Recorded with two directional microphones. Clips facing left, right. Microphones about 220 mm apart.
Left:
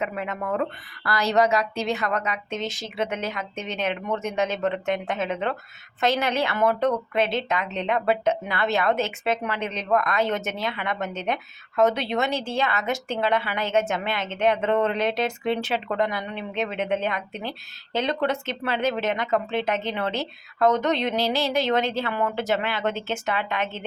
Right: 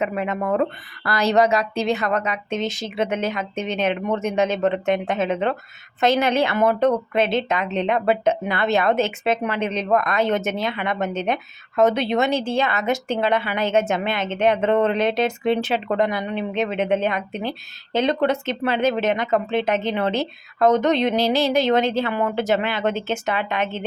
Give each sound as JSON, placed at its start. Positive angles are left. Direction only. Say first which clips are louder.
{"t": 0.0, "sound": "speech", "louder": "right 5 dB", "side_deg": -20}